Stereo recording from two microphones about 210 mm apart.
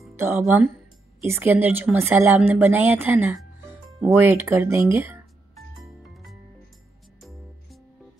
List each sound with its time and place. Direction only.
0.1 s a woman's voice: 10° right (ahead or behind)
5.9 s music: centre (ahead or behind)